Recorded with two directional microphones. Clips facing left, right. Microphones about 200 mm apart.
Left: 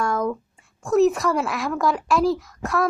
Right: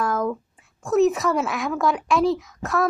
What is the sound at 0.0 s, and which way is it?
Speech, centre (ahead or behind).